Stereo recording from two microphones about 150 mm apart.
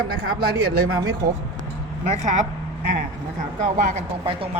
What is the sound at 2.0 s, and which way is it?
Speech, 50° right (ahead or behind).